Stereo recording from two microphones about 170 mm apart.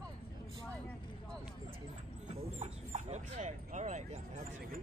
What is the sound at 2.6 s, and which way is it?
Dog, 40° right (ahead or behind).